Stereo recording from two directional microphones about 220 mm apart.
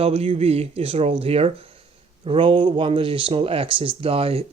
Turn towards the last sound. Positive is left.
turn(degrees=-25)  # may be behind; listen again after turning